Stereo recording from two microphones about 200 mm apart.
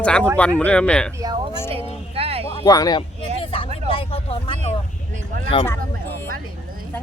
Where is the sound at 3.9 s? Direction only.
25° left (ahead or behind).